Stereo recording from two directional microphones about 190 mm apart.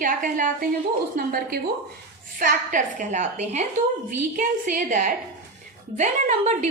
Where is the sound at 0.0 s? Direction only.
45° right (ahead or behind).